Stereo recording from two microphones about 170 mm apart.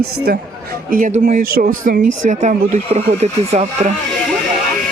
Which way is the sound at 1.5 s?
55° right (ahead or behind).